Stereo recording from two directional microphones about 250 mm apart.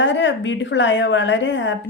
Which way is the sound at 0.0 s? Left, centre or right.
Left.